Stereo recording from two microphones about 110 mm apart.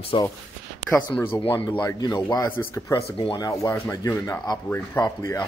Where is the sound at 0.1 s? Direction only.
50° left (ahead or behind).